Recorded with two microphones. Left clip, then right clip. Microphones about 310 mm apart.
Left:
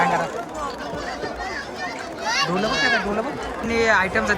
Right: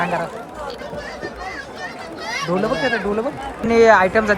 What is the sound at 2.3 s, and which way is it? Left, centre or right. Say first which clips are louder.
Speech: right 1 dB; centre.